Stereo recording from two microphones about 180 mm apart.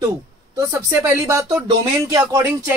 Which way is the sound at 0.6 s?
15° right (ahead or behind).